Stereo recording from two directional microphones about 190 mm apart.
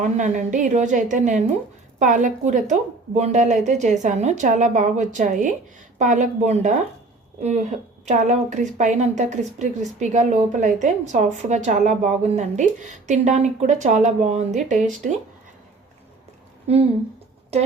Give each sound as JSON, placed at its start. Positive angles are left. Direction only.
{"t": 0.0, "sound": "a woman's voice", "side_deg": -40}
{"t": 8.0, "sound": "a woman's voice", "side_deg": -40}
{"t": 16.6, "sound": "a woman's voice", "side_deg": -30}